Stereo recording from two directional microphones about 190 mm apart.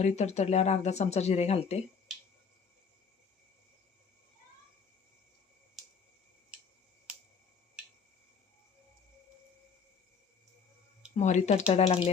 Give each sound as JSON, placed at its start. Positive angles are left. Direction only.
{"t": 0.0, "sound": "speech", "side_deg": 35}
{"t": 11.2, "sound": "speech", "side_deg": 40}